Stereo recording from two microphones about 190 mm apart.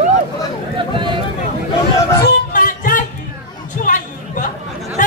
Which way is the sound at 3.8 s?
45° left (ahead or behind).